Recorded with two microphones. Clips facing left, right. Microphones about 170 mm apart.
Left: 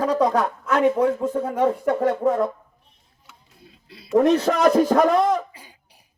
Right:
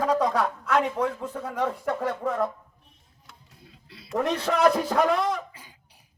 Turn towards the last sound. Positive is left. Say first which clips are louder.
# left 6 dB
turn(degrees=40)  # may be behind; listen again after turning